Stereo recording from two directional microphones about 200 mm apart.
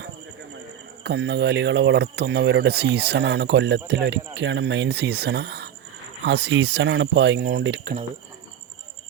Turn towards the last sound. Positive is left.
turn(degrees=-60)  # may be behind; listen again after turning